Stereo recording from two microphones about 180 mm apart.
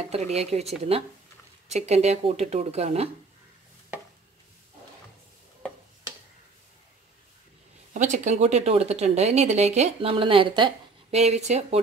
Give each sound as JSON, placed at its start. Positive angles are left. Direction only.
{"t": 0.1, "sound": "speech", "side_deg": -35}
{"t": 1.9, "sound": "speech", "side_deg": -35}
{"t": 7.9, "sound": "speech", "side_deg": -45}